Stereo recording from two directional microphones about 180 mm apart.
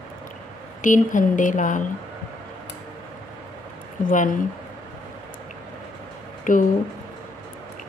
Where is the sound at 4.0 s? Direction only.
45° left (ahead or behind).